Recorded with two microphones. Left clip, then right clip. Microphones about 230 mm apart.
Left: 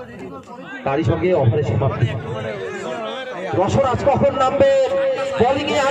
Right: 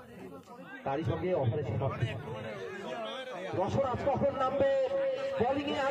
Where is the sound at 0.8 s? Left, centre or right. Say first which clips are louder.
Left 14 dB; left.